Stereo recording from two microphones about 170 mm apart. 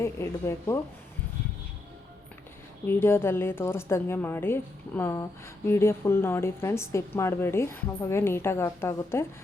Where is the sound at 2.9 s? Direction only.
15° left (ahead or behind).